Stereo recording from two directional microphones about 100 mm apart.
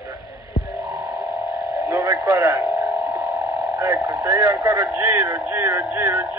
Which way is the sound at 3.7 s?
35° right (ahead or behind).